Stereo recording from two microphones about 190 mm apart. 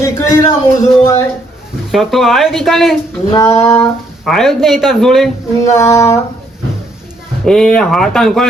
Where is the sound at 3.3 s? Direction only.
20° left (ahead or behind).